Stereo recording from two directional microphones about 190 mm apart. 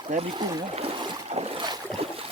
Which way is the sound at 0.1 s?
30° right (ahead or behind).